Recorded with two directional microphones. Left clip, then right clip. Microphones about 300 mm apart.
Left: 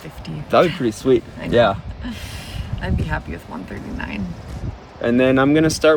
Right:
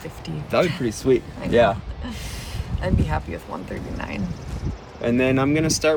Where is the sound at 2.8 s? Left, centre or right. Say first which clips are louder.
Right 1 dB; centre.